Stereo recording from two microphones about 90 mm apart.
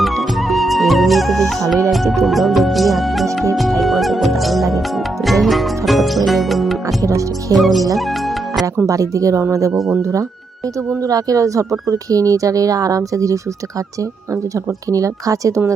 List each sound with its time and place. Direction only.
0.0 s music: centre (ahead or behind)
1.9 s speech: centre (ahead or behind)
3.5 s music: centre (ahead or behind)
6.8 s speech: 40° right (ahead or behind)
7.5 s speech: centre (ahead or behind)
7.9 s music: centre (ahead or behind)
8.9 s speech: 40° right (ahead or behind)
9.7 s speech: centre (ahead or behind)
10.0 s speech: 40° right (ahead or behind)
14.5 s speech: 40° right (ahead or behind)